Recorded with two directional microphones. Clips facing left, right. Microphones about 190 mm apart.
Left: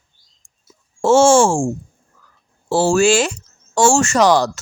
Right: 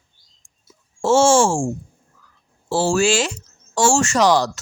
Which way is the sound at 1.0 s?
55° left (ahead or behind).